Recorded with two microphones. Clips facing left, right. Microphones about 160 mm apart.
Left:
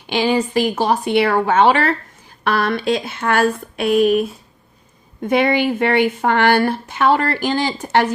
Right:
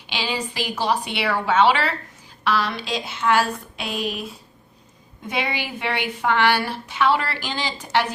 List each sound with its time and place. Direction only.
0.1 s speech: 50° left (ahead or behind)